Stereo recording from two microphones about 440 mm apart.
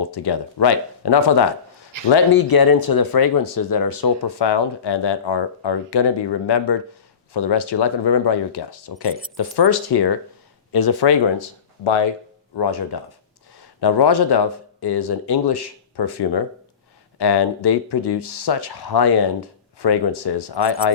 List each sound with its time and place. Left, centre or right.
0.0 s speech: left
11.3 s speech: left
12.5 s speech: left